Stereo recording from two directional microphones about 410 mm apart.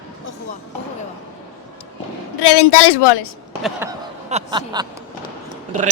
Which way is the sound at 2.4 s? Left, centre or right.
Left.